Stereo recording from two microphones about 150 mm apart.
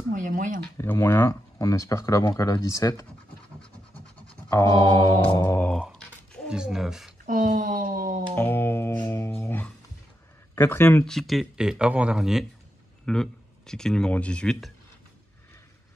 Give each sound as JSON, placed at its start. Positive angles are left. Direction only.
{"t": 0.1, "sound": "speech", "side_deg": -65}
{"t": 0.7, "sound": "speech", "side_deg": 20}
{"t": 4.5, "sound": "speech", "side_deg": 25}
{"t": 5.5, "sound": "a sound", "side_deg": 10}
{"t": 6.5, "sound": "speech", "side_deg": -5}
{"t": 7.2, "sound": "a sound", "side_deg": -70}
{"t": 8.4, "sound": "music", "side_deg": 15}
{"t": 10.5, "sound": "speech", "side_deg": 15}
{"t": 11.1, "sound": "speech", "side_deg": 0}